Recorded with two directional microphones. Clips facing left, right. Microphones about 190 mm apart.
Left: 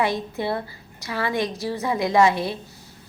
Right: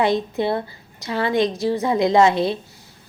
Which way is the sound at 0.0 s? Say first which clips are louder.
Right 5 dB; 20° right (ahead or behind).